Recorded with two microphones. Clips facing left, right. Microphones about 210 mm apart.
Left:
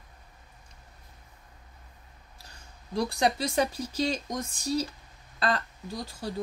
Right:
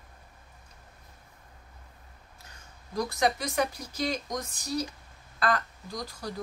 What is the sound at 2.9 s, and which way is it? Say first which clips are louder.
Speech: left 1 dB; 30° left (ahead or behind).